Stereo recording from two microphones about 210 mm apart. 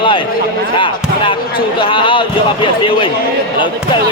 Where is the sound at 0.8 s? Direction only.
25° left (ahead or behind).